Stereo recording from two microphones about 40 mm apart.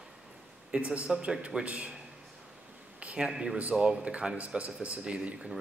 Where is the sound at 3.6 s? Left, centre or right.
Right.